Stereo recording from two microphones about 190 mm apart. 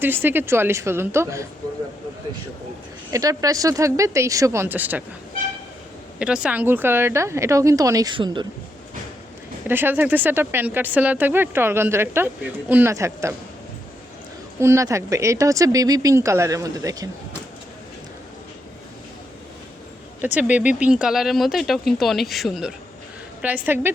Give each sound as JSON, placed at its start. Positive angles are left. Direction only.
{"t": 0.0, "sound": "speech", "side_deg": -10}
{"t": 3.1, "sound": "speech", "side_deg": -15}
{"t": 6.1, "sound": "speech", "side_deg": -5}
{"t": 9.6, "sound": "speech", "side_deg": -10}
{"t": 14.6, "sound": "speech", "side_deg": -15}
{"t": 20.2, "sound": "speech", "side_deg": -10}
{"t": 23.6, "sound": "speech", "side_deg": -10}